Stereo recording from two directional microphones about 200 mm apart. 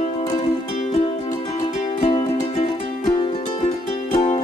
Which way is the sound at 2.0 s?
25° left (ahead or behind).